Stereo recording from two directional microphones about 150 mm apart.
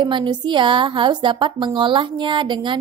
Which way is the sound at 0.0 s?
30° right (ahead or behind).